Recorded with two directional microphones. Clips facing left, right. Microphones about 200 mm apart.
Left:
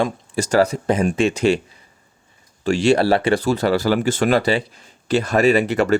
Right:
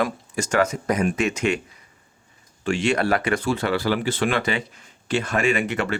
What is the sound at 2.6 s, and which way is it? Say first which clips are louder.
Speech: left 6 dB; 35° left (ahead or behind).